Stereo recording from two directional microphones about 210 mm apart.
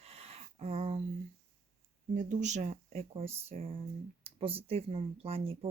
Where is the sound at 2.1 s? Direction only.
35° right (ahead or behind).